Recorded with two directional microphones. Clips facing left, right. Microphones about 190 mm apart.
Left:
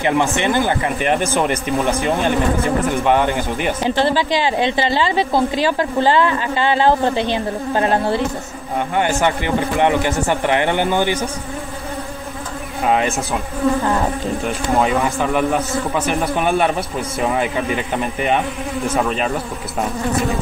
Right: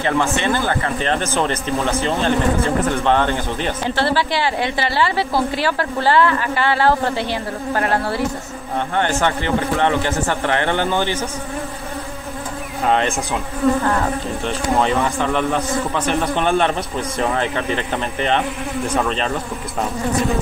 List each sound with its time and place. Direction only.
0.0 s speech: 15° left (ahead or behind)
12.8 s speech: 5° left (ahead or behind)
14.8 s speech: 5° left (ahead or behind)